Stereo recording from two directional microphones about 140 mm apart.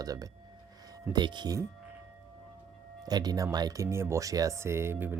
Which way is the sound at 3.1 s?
30° right (ahead or behind).